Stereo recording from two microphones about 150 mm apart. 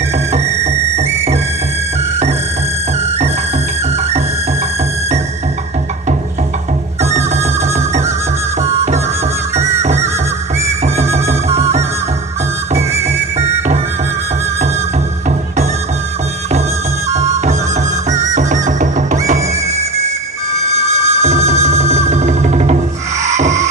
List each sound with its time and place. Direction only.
0.3 s music: 45° right (ahead or behind)
7.0 s music: 45° right (ahead or behind)
9.6 s music: 50° right (ahead or behind)
13.0 s music: 45° right (ahead or behind)
17.1 s music: 50° right (ahead or behind)
20.7 s music: 45° right (ahead or behind)